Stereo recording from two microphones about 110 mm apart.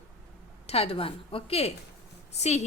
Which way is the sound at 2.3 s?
85° left.